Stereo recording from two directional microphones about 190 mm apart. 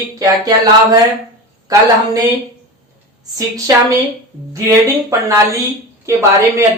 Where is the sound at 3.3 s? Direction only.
15° right (ahead or behind).